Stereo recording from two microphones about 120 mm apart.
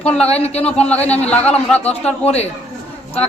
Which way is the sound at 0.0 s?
10° left (ahead or behind).